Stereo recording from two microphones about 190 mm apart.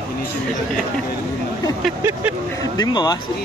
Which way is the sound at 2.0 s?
10° right (ahead or behind).